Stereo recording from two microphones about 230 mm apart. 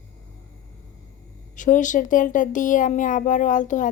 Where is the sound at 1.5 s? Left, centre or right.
Left.